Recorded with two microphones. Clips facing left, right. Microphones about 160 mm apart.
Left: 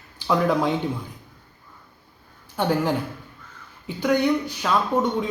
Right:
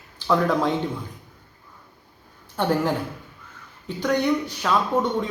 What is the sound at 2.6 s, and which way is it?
Speech, centre (ahead or behind).